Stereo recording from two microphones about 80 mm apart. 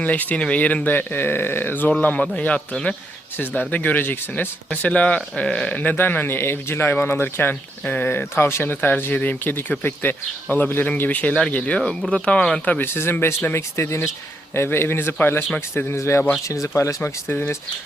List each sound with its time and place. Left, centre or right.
0.0 s speech: centre
12.8 s speech: left
17.0 s speech: left